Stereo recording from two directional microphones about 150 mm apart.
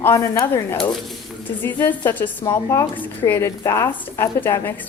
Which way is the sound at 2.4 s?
25° left (ahead or behind).